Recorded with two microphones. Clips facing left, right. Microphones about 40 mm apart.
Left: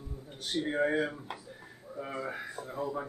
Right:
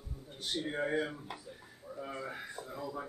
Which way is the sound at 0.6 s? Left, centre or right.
Left.